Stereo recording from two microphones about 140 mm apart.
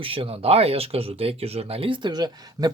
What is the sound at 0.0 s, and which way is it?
Speech, 40° right (ahead or behind).